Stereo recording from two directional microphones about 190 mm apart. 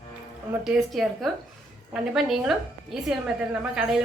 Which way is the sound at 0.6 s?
Centre (ahead or behind).